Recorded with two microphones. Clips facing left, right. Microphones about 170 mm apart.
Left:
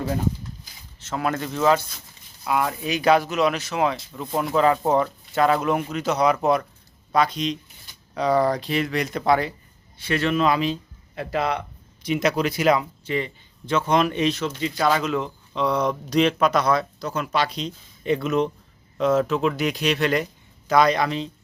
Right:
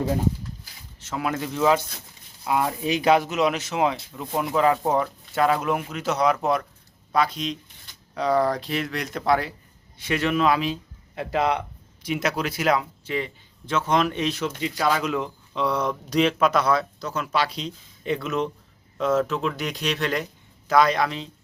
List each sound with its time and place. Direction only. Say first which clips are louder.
0.9 s speech: left 2 dB; 10° right (ahead or behind)
4.1 s speech: left 2 dB; 10° right (ahead or behind)
10.0 s speech: left 1 dB; 15° right (ahead or behind)
11.1 s speech: right 1 dB; 20° right (ahead or behind)
12.0 s speech: left 4 dB; 5° right (ahead or behind)